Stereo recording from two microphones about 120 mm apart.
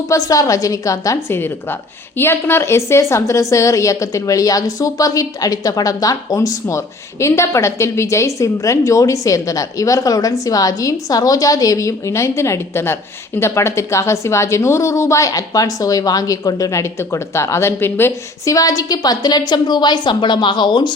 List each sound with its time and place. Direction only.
0.1 s a woman's voice: 30° left (ahead or behind)